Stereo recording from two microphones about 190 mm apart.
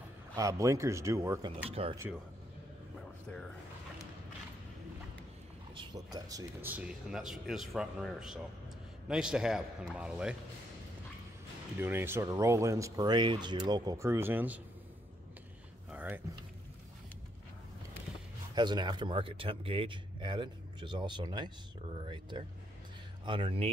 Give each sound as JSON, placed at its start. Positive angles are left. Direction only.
{"t": 0.4, "sound": "speech", "side_deg": -15}
{"t": 1.7, "sound": "a man's voice", "side_deg": -30}
{"t": 6.1, "sound": "speech", "side_deg": -20}
{"t": 11.8, "sound": "speech", "side_deg": -10}
{"t": 15.9, "sound": "a sound", "side_deg": -10}
{"t": 18.5, "sound": "a man's voice", "side_deg": -25}